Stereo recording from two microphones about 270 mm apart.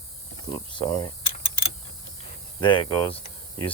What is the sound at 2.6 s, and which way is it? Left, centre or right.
Speech, centre.